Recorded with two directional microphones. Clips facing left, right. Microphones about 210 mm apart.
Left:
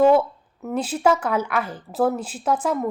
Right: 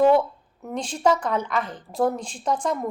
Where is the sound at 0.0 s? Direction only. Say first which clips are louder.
Left 2 dB; 5° left (ahead or behind).